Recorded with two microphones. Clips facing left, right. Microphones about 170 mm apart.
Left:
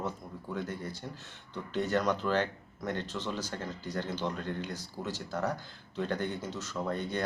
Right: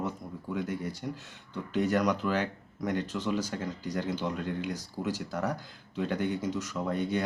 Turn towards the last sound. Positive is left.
turn(degrees=-10)  # may be behind; listen again after turning